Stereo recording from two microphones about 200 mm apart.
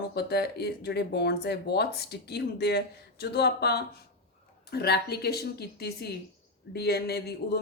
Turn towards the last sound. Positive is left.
turn(degrees=55)  # may be behind; listen again after turning